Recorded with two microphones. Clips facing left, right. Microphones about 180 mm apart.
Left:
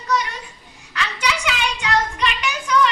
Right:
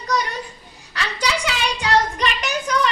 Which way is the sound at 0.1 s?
40° right (ahead or behind).